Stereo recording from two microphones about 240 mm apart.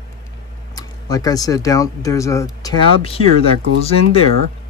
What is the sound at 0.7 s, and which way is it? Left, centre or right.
Speech, centre.